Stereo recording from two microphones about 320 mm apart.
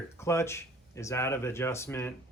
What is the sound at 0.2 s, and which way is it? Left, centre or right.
Speech, centre.